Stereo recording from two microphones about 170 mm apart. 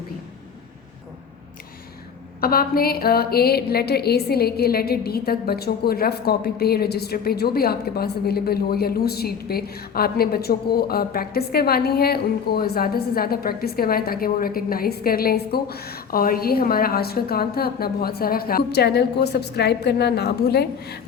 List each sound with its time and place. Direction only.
2.4 s a woman's voice: 60° left (ahead or behind)